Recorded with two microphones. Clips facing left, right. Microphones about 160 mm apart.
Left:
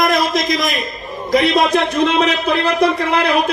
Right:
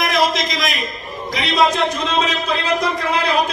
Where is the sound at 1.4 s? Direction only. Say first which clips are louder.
Right 2 dB; 60° left (ahead or behind).